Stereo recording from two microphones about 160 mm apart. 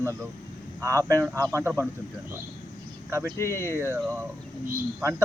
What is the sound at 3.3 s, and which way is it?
Speech, 15° left (ahead or behind).